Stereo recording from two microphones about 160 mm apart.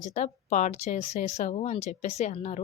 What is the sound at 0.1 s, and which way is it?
A woman's voice, 50° left (ahead or behind).